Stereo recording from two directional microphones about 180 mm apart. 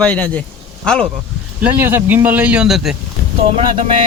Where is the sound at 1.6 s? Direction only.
10° right (ahead or behind).